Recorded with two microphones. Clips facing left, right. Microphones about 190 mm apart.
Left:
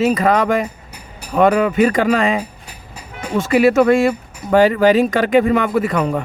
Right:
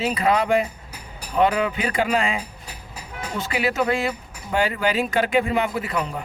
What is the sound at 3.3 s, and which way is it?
Speech, 60° left (ahead or behind).